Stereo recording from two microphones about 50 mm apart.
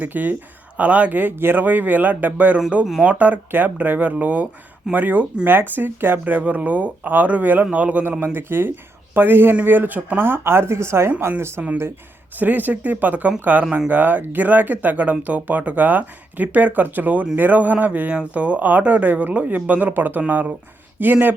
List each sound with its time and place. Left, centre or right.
0.0 s speech: right
0.8 s speech: right
8.2 s speech: right
10.2 s a woman's voice: right
12.4 s speech: right